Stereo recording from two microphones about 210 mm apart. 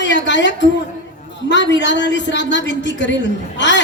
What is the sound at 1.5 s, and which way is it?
A woman's voice, 55° left (ahead or behind).